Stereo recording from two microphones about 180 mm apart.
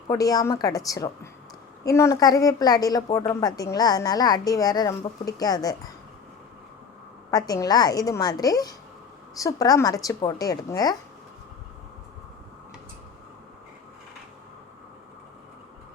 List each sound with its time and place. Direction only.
0.1 s a woman's voice: 20° left (ahead or behind)
7.3 s a woman's voice: 20° left (ahead or behind)